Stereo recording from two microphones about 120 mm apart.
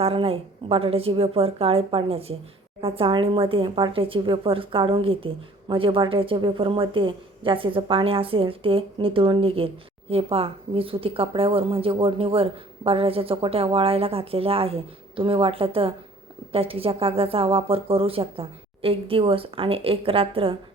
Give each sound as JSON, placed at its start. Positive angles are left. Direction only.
{"t": 0.0, "sound": "speech", "side_deg": -50}